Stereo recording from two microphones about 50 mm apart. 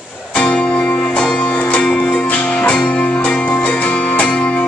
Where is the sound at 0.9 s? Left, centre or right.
Left.